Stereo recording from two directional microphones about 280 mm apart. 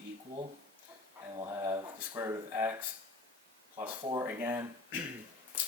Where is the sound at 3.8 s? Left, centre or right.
Centre.